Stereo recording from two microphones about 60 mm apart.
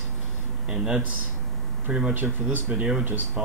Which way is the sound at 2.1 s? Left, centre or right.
Right.